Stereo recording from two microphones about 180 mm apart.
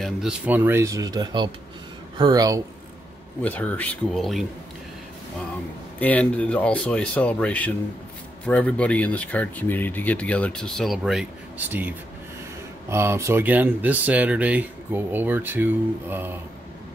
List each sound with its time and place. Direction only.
0.0 s speech: 5° right (ahead or behind); by 2.6 s 20° right (ahead or behind)
3.4 s speech: 10° left (ahead or behind)
5.9 s speech: 10° left (ahead or behind); by 11.9 s 10° right (ahead or behind)
12.9 s speech: 15° right (ahead or behind)